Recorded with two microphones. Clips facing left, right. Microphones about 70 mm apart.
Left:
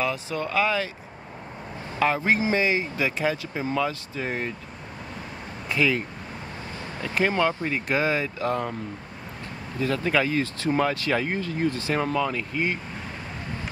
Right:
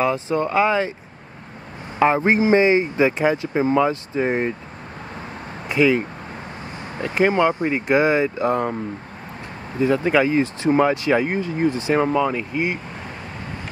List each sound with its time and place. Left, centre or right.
0.0 s speech: right
2.0 s speech: right
5.7 s speech: right
9.8 s speech: right